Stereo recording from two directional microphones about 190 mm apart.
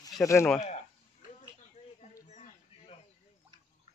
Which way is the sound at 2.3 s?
35° left (ahead or behind).